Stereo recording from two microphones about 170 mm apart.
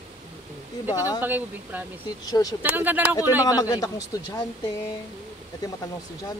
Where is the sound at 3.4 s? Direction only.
20° left (ahead or behind).